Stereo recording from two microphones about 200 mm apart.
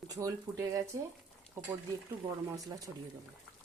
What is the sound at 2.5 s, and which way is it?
Speech, 15° right (ahead or behind).